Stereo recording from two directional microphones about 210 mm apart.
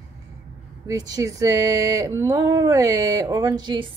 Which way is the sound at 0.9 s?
15° right (ahead or behind).